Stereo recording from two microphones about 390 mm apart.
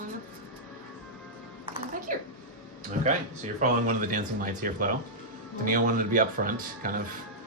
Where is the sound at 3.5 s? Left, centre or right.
Centre.